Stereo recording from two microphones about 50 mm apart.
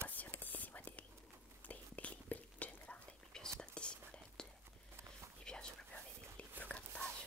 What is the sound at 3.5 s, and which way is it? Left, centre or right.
Whispering, centre.